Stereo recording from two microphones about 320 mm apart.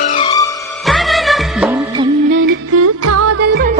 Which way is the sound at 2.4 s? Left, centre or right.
Right.